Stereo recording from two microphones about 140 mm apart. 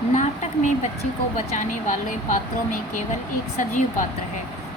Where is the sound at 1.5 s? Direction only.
70° left (ahead or behind).